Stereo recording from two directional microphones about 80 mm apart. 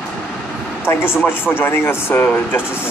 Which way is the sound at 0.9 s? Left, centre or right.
Left.